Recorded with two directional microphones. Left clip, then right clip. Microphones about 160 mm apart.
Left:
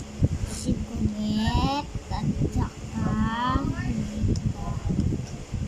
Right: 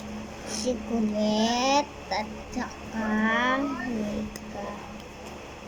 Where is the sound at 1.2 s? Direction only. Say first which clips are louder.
Right 3 dB; 30° left (ahead or behind).